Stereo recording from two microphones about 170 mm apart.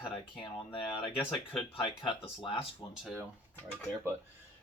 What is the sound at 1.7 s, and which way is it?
Speech, 30° left (ahead or behind).